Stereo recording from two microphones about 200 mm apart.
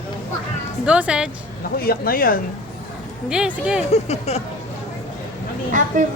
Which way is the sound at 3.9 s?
30° left (ahead or behind).